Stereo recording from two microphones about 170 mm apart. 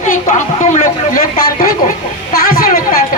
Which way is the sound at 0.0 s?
50° left (ahead or behind).